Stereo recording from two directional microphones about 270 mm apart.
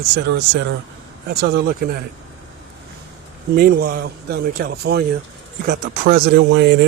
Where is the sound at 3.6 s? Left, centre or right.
Right.